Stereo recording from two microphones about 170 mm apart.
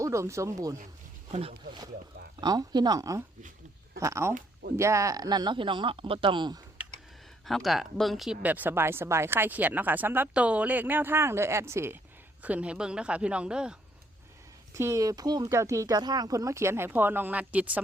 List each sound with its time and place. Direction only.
0.0 s speech: 15° right (ahead or behind)
1.3 s speech: 35° right (ahead or behind)
2.4 s speech: 25° right (ahead or behind)
7.4 s speech: centre (ahead or behind)
14.7 s speech: 15° right (ahead or behind)